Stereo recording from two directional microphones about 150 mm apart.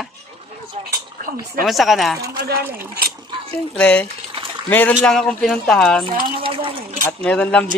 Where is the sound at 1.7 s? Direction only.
Centre (ahead or behind).